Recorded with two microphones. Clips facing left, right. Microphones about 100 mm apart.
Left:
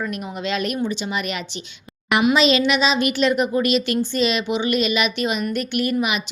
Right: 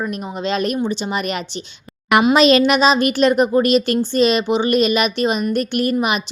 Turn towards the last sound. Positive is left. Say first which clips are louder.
# right 4 dB
turn(degrees=-40)  # may be behind; listen again after turning